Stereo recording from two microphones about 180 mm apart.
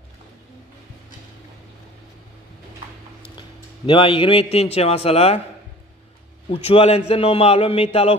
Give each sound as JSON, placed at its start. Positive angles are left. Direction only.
{"t": 3.3, "sound": "a man's voice", "side_deg": 30}
{"t": 6.5, "sound": "a man's voice", "side_deg": 35}